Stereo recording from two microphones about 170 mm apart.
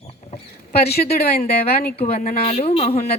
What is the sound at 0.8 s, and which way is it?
Speech, 70° left (ahead or behind).